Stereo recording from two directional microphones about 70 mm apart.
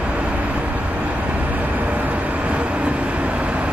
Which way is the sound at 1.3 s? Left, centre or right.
Right.